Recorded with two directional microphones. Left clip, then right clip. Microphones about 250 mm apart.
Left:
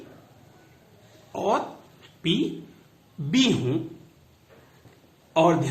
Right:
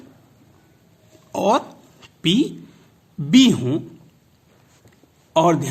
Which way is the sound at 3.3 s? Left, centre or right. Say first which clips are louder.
Right 7 dB; right.